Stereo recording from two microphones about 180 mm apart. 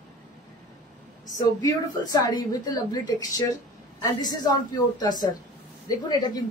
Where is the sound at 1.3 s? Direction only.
20° left (ahead or behind).